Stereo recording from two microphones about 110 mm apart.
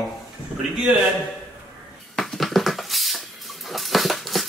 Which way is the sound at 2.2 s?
Centre (ahead or behind).